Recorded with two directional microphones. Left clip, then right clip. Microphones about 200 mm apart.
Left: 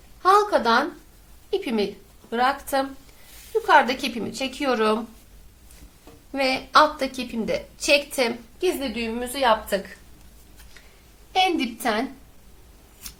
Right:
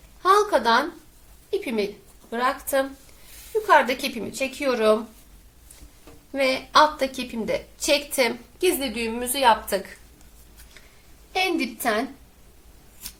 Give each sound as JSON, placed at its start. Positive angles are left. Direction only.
{"t": 0.2, "sound": "a sound", "side_deg": 10}
{"t": 1.5, "sound": "a woman's voice", "side_deg": 15}
{"t": 6.3, "sound": "a woman's voice", "side_deg": 10}
{"t": 8.6, "sound": "a woman's voice", "side_deg": -10}
{"t": 11.3, "sound": "a woman's voice", "side_deg": 10}